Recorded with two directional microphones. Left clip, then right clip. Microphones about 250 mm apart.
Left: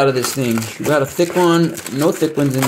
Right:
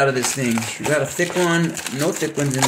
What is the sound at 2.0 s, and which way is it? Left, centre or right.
Speech, centre.